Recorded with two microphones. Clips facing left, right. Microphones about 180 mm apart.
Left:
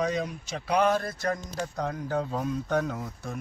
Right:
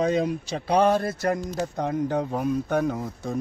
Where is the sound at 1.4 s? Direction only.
20° right (ahead or behind).